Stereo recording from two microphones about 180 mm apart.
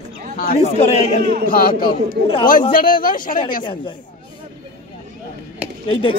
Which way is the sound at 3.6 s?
25° left (ahead or behind).